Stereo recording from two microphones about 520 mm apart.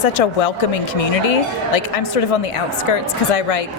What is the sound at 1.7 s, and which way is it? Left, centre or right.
Speech, left.